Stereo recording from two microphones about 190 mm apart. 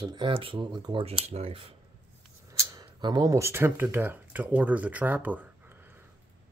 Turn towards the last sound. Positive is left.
turn(degrees=-10)  # may be behind; listen again after turning